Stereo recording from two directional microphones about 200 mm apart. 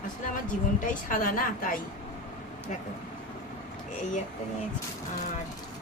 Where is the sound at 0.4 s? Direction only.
40° left (ahead or behind).